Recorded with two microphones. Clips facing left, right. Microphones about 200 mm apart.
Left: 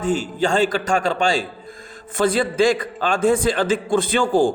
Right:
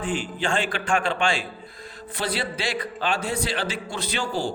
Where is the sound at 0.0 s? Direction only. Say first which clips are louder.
Left 7 dB; 45° left (ahead or behind).